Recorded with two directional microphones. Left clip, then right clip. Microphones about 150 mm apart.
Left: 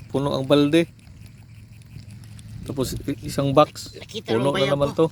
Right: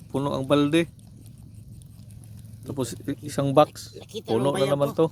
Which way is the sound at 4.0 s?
45° right (ahead or behind).